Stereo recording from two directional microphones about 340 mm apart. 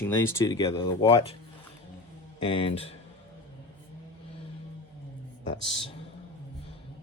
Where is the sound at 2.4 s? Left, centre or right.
Centre.